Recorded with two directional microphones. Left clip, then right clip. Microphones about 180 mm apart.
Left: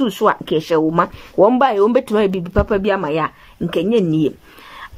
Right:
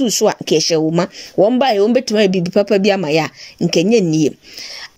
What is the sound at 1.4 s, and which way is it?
Speech, 5° right (ahead or behind).